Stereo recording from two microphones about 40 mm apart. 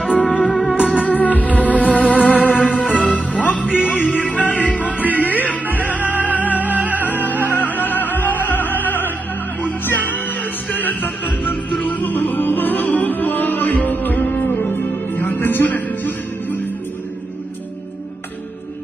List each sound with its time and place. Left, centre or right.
0.2 s music: left
0.7 s music: right
1.0 s music: left
6.7 s music: right
7.0 s music: left
14.4 s music: left